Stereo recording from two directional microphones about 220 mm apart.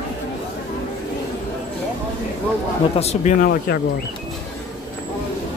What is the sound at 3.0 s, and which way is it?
Speech, 30° left (ahead or behind).